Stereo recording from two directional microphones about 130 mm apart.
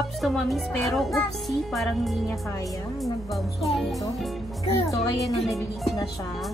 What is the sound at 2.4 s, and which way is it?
Speech, 25° left (ahead or behind).